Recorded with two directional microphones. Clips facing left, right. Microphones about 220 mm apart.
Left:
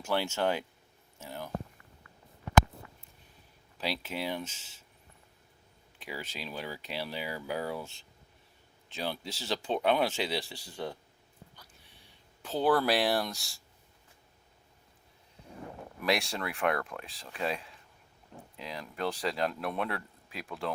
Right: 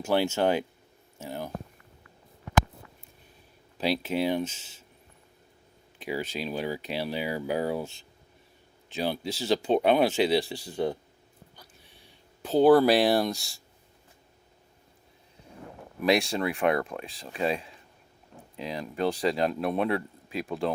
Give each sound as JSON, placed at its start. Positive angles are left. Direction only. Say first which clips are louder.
{"t": 0.0, "sound": "speech", "louder": "right 6 dB", "side_deg": -15}
{"t": 1.2, "sound": "a sound", "louder": "right 6 dB", "side_deg": -15}
{"t": 3.8, "sound": "speech", "louder": "right 9 dB", "side_deg": -15}
{"t": 6.0, "sound": "speech", "louder": "right 9 dB", "side_deg": -20}
{"t": 8.9, "sound": "speech", "louder": "right 7 dB", "side_deg": -10}
{"t": 12.6, "sound": "speech", "louder": "right 7 dB", "side_deg": -15}
{"t": 16.0, "sound": "speech", "louder": "right 7 dB", "side_deg": -20}